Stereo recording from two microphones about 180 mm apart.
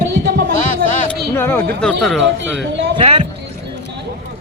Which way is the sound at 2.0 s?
Centre (ahead or behind).